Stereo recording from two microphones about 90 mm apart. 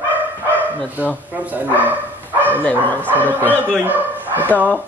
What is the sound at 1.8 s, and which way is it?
Dog, 20° right (ahead or behind).